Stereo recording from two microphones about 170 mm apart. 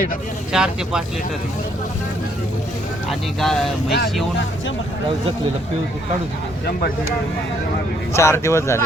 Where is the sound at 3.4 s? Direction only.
Centre (ahead or behind).